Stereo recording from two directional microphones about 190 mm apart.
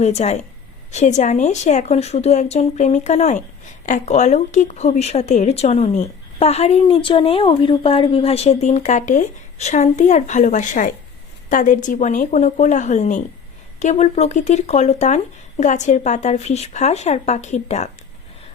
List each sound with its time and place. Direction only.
0.0 s speech: 35° left (ahead or behind)